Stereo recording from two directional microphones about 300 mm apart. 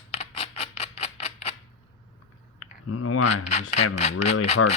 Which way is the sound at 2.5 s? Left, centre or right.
Left.